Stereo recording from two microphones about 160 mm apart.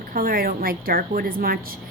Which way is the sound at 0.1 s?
65° right (ahead or behind).